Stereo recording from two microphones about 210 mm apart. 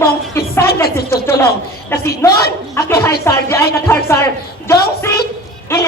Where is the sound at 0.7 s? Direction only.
45° left (ahead or behind).